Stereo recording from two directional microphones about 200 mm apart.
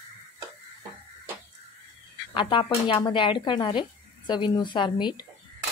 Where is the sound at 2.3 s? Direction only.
25° left (ahead or behind).